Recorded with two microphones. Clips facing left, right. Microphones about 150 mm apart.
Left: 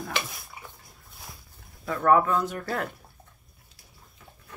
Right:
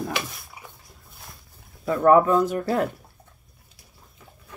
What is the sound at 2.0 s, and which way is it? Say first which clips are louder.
Speech: right 5 dB; 15° right (ahead or behind).